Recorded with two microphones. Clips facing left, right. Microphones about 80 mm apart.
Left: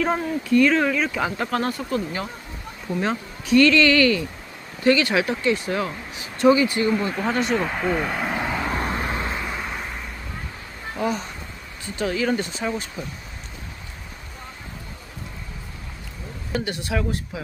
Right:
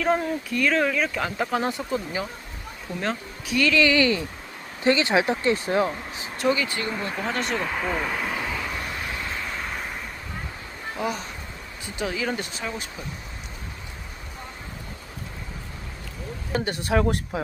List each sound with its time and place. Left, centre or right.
0.0 s speech: centre
3.0 s speech: centre; by 6.2 s right
6.5 s speech: centre
6.9 s speech: centre
8.2 s vehicle: centre
8.7 s vehicle: left
9.3 s vehicle: centre
10.9 s speech: centre
16.5 s a woman's voice: right